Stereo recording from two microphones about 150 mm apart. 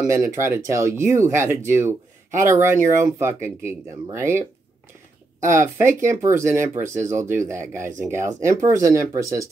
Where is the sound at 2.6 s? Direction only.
15° right (ahead or behind).